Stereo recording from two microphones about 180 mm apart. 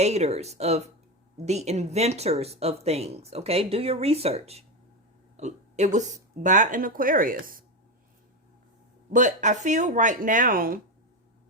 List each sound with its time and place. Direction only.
0.0 s speech: 35° right (ahead or behind)
9.0 s speech: 45° right (ahead or behind)